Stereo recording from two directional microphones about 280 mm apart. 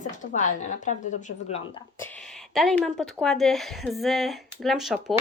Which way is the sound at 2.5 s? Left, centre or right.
Centre.